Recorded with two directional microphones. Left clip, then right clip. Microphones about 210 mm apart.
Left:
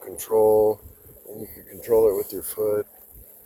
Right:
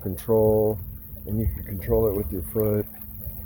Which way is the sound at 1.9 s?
40° left (ahead or behind).